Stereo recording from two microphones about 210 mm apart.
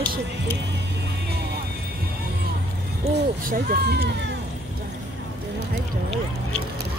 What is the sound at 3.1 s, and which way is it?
Speech, 45° right (ahead or behind).